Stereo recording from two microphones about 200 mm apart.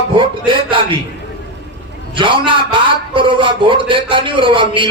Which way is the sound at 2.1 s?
25° right (ahead or behind).